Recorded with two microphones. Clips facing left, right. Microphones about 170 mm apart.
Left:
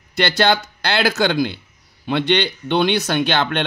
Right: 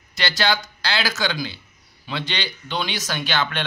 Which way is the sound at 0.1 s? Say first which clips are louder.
Left 6 dB; 55° left (ahead or behind).